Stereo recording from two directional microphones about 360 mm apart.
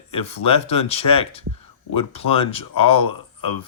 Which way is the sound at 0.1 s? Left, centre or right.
Centre.